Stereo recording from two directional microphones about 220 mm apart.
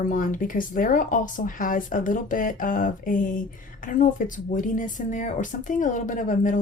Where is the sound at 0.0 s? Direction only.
35° left (ahead or behind).